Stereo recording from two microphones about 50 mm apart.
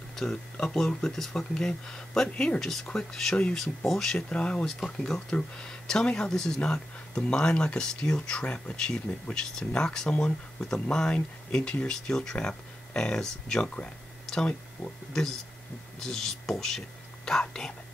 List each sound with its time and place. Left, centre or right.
0.1 s speech: centre
4.3 s speech: left
4.6 s speech: centre
14.2 s a sound: centre
16.0 s speech: centre